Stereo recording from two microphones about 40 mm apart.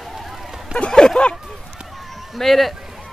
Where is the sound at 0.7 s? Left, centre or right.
Left.